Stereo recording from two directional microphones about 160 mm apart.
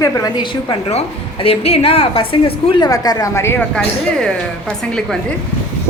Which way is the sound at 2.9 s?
25° left (ahead or behind).